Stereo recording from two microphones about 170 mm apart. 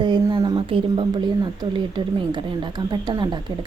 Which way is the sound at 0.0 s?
25° right (ahead or behind).